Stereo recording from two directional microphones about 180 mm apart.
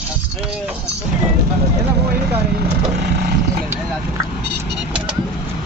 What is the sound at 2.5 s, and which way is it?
Speech, 65° right (ahead or behind).